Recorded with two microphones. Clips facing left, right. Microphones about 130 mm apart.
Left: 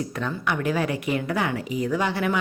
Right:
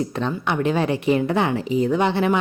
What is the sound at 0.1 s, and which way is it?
A woman's voice, 25° right (ahead or behind).